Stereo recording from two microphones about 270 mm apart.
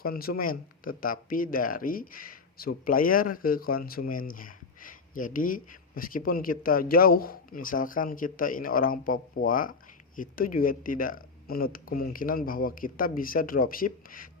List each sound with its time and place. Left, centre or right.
0.0 s speech: left